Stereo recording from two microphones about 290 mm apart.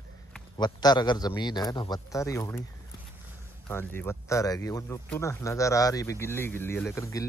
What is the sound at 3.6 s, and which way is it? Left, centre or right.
Speech, centre.